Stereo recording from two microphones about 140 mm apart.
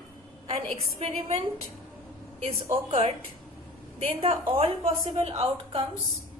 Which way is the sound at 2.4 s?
50° right (ahead or behind).